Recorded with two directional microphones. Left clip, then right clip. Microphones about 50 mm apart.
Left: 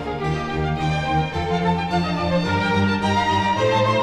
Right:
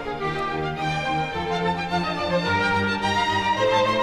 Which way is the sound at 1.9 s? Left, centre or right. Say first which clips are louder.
Left 1 dB; centre.